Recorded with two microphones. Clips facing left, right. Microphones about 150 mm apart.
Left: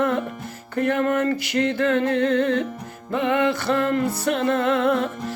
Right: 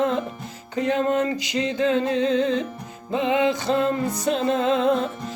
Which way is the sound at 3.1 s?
15° right (ahead or behind).